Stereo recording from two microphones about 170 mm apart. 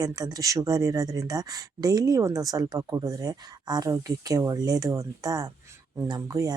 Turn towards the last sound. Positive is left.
turn(degrees=-20)  # may be behind; listen again after turning